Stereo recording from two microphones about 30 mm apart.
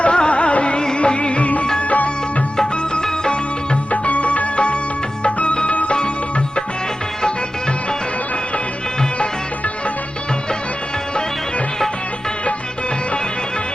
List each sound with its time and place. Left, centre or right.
0.0 s music: left
3.9 s music: left